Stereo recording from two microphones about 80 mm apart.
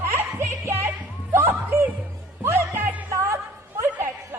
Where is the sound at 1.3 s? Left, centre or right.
Right.